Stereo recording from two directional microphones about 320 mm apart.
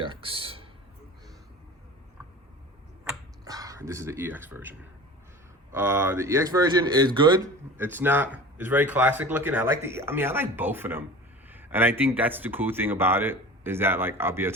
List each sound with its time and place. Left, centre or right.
0.0 s a sound: centre
3.0 s finger snapping: centre
5.7 s a man's voice: centre